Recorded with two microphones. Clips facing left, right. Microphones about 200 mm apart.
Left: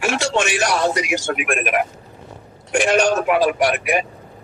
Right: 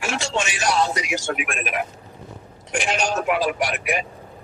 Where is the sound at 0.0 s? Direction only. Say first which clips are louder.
Left 5 dB; 65° left (ahead or behind).